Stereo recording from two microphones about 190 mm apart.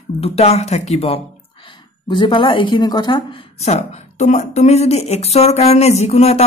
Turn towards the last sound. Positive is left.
turn(degrees=35)  # may be behind; listen again after turning